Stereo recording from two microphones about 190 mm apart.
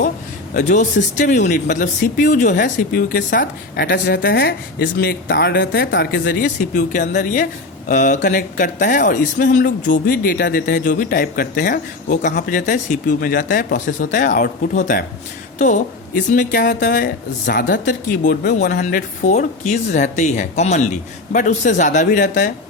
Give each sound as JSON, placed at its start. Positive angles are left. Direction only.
{"t": 0.5, "sound": "speech", "side_deg": 40}
{"t": 18.8, "sound": "speech", "side_deg": 45}